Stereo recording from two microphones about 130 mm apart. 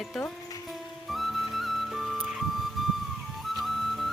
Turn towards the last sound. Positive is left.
turn(degrees=0)  # may be behind; listen again after turning